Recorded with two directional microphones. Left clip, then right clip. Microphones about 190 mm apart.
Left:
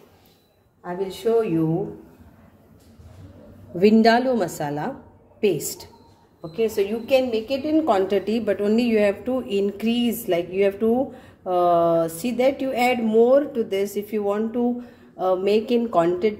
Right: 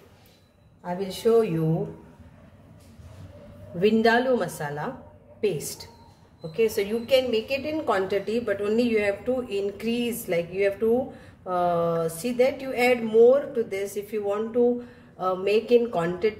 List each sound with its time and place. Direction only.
0.8 s a woman's voice: 15° left (ahead or behind)
3.8 s a woman's voice: 30° left (ahead or behind)
6.6 s a woman's voice: 25° left (ahead or behind)